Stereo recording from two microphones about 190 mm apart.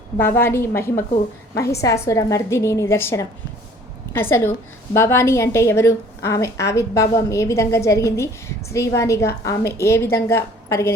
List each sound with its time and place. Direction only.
0.2 s a woman's voice: 10° left (ahead or behind)